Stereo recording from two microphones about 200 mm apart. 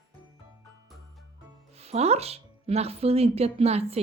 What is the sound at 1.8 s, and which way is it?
A woman's voice, 30° right (ahead or behind).